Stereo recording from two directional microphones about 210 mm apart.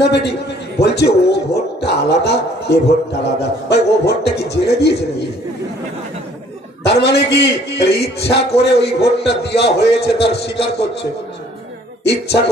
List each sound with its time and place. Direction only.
0.0 s a man's voice: 55° left (ahead or behind)
6.8 s a man's voice: 55° left (ahead or behind)